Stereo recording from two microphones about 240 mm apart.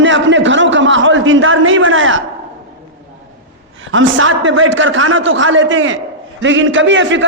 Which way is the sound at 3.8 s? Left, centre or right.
Right.